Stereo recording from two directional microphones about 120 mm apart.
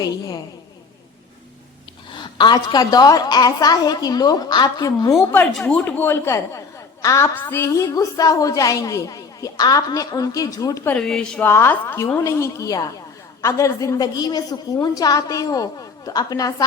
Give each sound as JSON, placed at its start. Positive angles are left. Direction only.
{"t": 2.1, "sound": "a woman's voice", "side_deg": 40}
{"t": 5.6, "sound": "a woman's voice", "side_deg": 15}
{"t": 10.8, "sound": "speech", "side_deg": 5}
{"t": 11.4, "sound": "a woman's voice", "side_deg": 20}